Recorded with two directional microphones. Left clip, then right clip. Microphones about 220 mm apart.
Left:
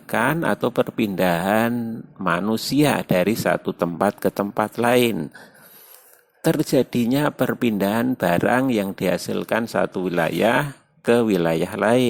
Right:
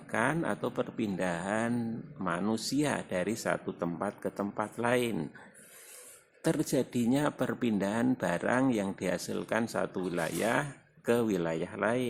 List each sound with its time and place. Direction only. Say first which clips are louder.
0.1 s speech: left 10 dB; 35° left (ahead or behind)
6.4 s speech: left 11 dB; 30° left (ahead or behind)